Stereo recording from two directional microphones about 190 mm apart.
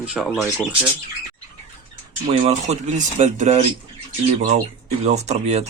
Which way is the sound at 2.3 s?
35° right (ahead or behind).